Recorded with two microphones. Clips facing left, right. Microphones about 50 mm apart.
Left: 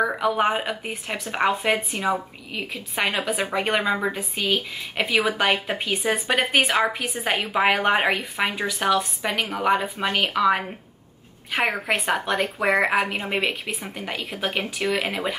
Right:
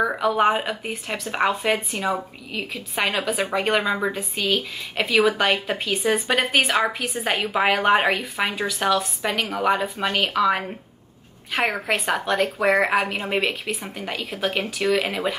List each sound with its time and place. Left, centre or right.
0.0 s a woman's voice: centre
7.2 s a woman's voice: centre